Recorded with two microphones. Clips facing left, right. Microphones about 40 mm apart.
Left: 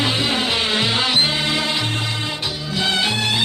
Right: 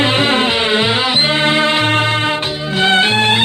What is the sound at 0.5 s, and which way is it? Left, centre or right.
Music, right.